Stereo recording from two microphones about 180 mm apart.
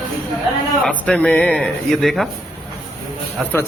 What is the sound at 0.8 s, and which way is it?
A man's voice, 5° left (ahead or behind).